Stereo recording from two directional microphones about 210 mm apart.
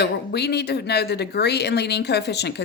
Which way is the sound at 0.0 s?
50° left (ahead or behind).